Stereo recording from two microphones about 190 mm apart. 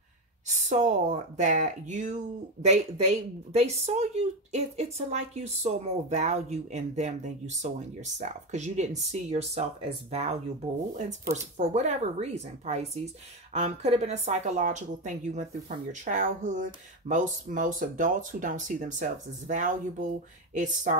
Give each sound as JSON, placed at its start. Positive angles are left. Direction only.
{"t": 0.5, "sound": "speech", "side_deg": -40}
{"t": 11.5, "sound": "speech", "side_deg": -35}